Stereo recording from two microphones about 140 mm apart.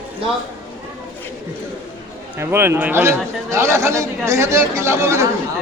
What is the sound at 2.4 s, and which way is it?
A man's voice, 15° right (ahead or behind).